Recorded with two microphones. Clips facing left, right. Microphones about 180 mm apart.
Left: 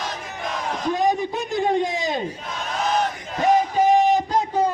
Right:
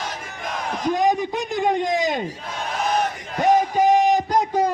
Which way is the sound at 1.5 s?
15° right (ahead or behind).